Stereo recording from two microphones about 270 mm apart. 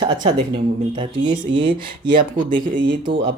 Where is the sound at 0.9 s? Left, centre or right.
Centre.